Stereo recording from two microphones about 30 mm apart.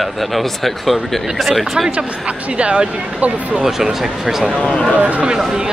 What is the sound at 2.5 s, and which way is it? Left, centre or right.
Speech, right.